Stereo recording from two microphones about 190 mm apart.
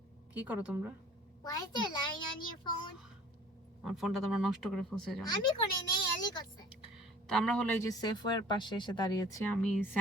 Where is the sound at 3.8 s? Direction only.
Centre (ahead or behind).